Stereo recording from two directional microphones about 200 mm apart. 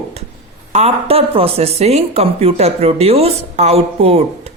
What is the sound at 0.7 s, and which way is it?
Speech, 30° right (ahead or behind).